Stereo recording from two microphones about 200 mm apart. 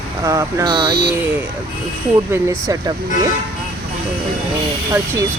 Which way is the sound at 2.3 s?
15° right (ahead or behind).